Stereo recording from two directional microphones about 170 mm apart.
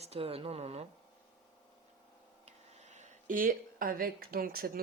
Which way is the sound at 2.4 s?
40° right (ahead or behind).